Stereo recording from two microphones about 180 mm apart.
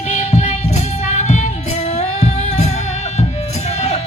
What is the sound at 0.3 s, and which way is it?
Music, 40° left (ahead or behind).